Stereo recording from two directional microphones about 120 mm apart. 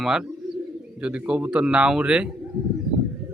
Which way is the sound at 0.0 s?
5° right (ahead or behind).